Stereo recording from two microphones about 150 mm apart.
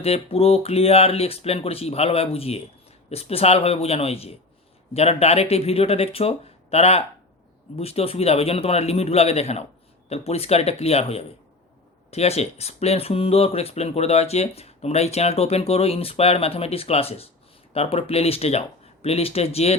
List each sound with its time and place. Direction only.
0.0 s speech: 40° left (ahead or behind)